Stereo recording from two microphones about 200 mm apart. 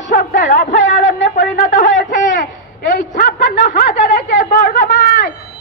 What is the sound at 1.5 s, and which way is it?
Speech, 40° left (ahead or behind).